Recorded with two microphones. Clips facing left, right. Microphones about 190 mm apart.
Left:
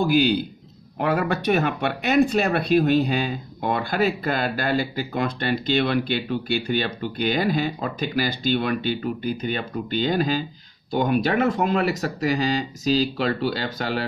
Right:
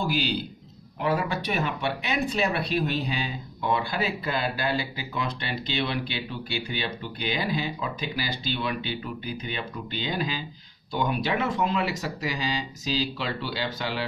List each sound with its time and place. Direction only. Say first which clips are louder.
0.0 s speech: left 8 dB; 55° left (ahead or behind)